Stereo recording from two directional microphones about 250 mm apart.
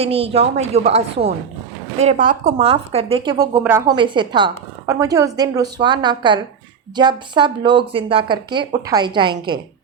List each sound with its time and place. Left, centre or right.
0.0 s a woman's voice: right